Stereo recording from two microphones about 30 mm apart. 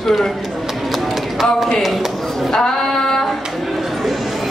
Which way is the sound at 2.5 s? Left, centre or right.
Centre.